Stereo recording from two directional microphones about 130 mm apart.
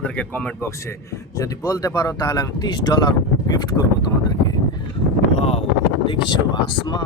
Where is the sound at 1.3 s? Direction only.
25° left (ahead or behind).